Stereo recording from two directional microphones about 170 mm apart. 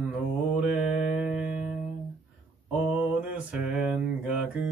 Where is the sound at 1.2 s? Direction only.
5° right (ahead or behind).